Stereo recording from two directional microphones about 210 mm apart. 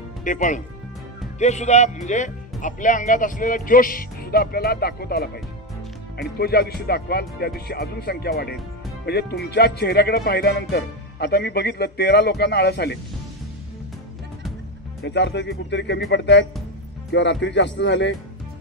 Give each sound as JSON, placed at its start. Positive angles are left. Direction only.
{"t": 0.2, "sound": "speech", "side_deg": 35}
{"t": 15.0, "sound": "speech", "side_deg": 55}